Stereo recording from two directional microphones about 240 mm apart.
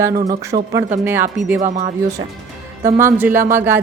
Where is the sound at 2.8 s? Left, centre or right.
Centre.